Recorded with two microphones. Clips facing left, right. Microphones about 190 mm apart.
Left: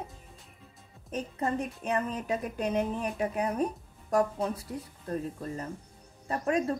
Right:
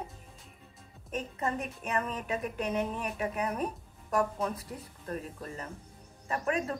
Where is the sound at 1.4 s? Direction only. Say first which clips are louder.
Left 4 dB; 30° left (ahead or behind).